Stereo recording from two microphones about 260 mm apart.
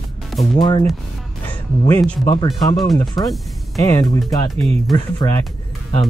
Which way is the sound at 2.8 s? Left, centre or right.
Centre.